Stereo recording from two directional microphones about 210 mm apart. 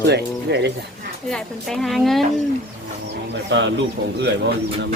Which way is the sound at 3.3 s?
60° right (ahead or behind).